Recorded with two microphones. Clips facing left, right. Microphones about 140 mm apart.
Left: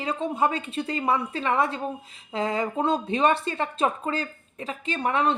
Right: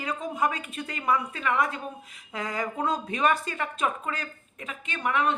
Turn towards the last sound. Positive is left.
turn(degrees=30)  # may be behind; listen again after turning